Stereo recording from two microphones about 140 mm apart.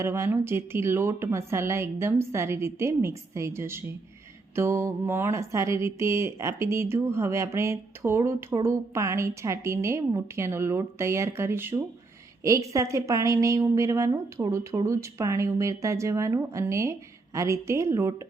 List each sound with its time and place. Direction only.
0.0 s speech: 20° right (ahead or behind)